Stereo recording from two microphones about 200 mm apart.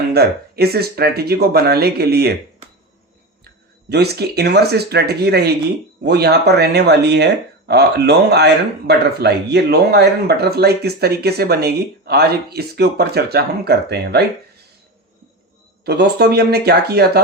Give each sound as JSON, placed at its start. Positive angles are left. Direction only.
{"t": 0.1, "sound": "speech", "side_deg": -50}
{"t": 3.4, "sound": "speech", "side_deg": -55}
{"t": 15.8, "sound": "speech", "side_deg": -55}